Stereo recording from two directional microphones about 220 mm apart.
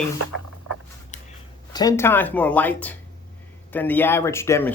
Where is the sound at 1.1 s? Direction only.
35° left (ahead or behind).